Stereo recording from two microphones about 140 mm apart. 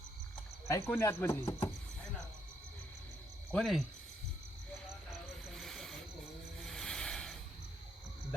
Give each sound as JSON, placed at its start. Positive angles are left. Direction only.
{"t": 0.7, "sound": "speech", "side_deg": 20}
{"t": 3.5, "sound": "cricket", "side_deg": 0}
{"t": 5.5, "sound": "wild animals", "side_deg": 0}
{"t": 6.7, "sound": "music", "side_deg": 5}